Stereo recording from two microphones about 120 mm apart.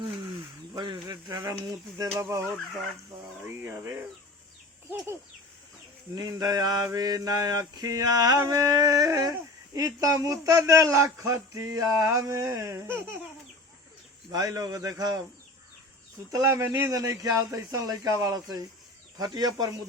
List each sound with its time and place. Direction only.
0.7 s a man's voice: 35° right (ahead or behind)
3.6 s a man's voice: 25° right (ahead or behind)
6.1 s mantra: 30° right (ahead or behind)
9.7 s a man's voice: 30° right (ahead or behind)
14.3 s mantra: 35° right (ahead or behind)
16.3 s a man's voice: 25° right (ahead or behind)
19.2 s mantra: 35° right (ahead or behind)